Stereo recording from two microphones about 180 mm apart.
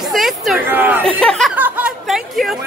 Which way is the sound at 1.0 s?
5° left (ahead or behind).